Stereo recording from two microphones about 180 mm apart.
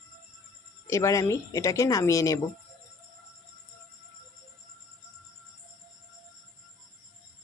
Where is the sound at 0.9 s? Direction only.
15° left (ahead or behind).